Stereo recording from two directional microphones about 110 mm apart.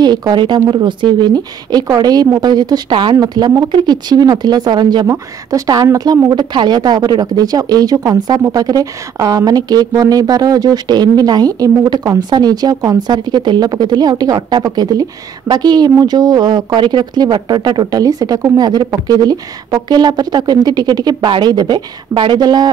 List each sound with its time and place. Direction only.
0.0 s a woman's voice: 40° right (ahead or behind)
5.0 s a woman's voice: 30° right (ahead or behind)